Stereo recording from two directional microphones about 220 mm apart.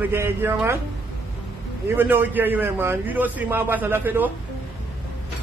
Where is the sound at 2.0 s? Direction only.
10° right (ahead or behind).